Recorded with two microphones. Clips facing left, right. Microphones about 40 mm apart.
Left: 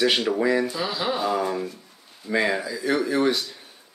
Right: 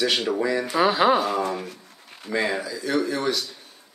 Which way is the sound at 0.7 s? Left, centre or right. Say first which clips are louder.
Right 8 dB; right.